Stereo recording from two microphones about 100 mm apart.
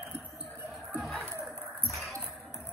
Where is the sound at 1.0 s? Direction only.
Centre (ahead or behind).